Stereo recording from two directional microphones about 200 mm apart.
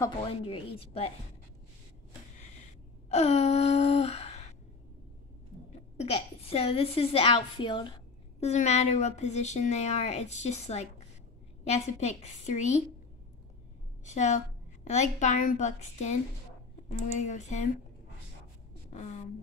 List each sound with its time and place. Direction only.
0.2 s a woman's voice: 30° left (ahead or behind)
3.1 s gasp: 30° left (ahead or behind)
5.9 s a woman's voice: 30° left (ahead or behind)
14.0 s speech: 35° left (ahead or behind)
17.2 s speech: 35° left (ahead or behind)
18.9 s a sound: 35° left (ahead or behind)